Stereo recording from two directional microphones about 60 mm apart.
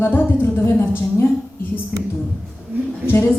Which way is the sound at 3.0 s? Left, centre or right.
Left.